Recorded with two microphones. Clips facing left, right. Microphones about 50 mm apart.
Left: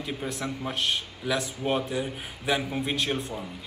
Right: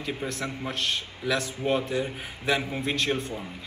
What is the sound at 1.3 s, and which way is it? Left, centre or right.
Speech, left.